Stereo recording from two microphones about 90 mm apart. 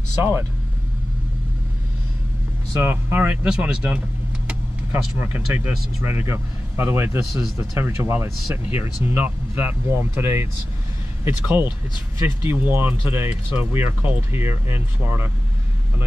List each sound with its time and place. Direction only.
0.2 s speech: 25° right (ahead or behind)
2.7 s speech: 25° right (ahead or behind)